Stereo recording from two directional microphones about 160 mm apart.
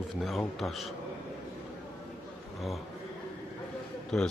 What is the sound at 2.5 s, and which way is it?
Speech, centre (ahead or behind).